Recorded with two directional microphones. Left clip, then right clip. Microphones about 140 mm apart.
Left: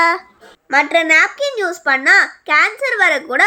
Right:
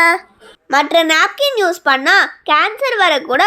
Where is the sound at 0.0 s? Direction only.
25° right (ahead or behind).